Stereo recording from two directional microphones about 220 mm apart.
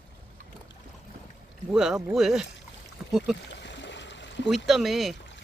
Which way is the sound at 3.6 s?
55° left (ahead or behind).